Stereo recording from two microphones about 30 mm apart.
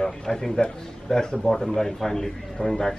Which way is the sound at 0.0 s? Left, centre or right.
Centre.